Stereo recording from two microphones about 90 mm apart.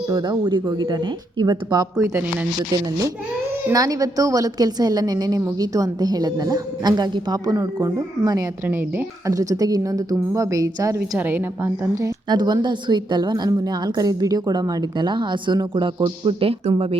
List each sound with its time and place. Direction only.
0.1 s a woman's voice: 55° right (ahead or behind)
3.7 s a woman's voice: 40° right (ahead or behind)
8.6 s a woman's voice: 20° right (ahead or behind)
9.2 s a woman's voice: 40° right (ahead or behind)
11.2 s a woman's voice: 20° right (ahead or behind)
11.9 s a woman's voice: 45° right (ahead or behind); by 17.0 s 90° right